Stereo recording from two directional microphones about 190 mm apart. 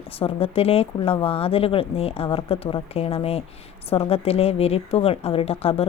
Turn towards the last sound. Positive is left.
turn(degrees=30)  # may be behind; listen again after turning